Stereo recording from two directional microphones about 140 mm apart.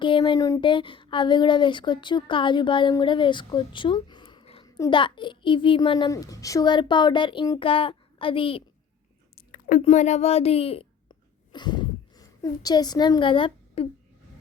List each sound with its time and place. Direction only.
0.0 s speech: 35° left (ahead or behind)
6.1 s speech: 25° left (ahead or behind); by 8.6 s 40° left (ahead or behind)
9.3 s chewing: 75° left (ahead or behind)
9.8 s speech: 55° left (ahead or behind); by 13.8 s 40° left (ahead or behind)